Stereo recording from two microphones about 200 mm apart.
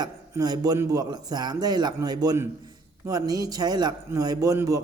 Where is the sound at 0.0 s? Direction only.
20° right (ahead or behind).